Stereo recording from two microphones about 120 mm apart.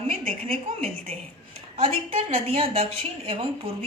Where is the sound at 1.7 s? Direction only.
50° right (ahead or behind).